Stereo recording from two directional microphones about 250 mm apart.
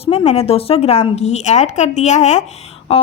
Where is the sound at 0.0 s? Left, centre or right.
Left.